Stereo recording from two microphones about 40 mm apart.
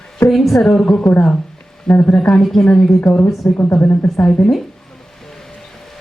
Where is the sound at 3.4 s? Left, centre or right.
Left.